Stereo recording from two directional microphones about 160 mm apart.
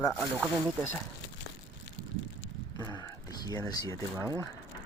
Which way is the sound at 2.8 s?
20° left (ahead or behind).